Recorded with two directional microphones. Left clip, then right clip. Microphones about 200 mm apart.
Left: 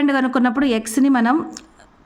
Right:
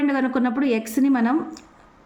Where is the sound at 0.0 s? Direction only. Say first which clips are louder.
Left 4 dB; 30° left (ahead or behind).